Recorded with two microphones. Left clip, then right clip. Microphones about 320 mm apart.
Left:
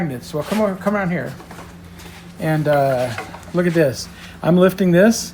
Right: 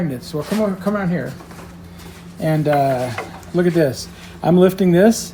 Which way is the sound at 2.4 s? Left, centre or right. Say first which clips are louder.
Even; centre.